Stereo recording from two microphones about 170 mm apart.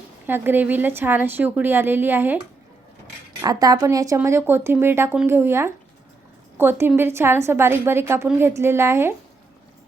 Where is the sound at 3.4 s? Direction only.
20° right (ahead or behind).